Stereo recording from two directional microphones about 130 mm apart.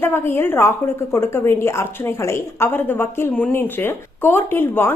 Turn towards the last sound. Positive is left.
turn(degrees=15)  # may be behind; listen again after turning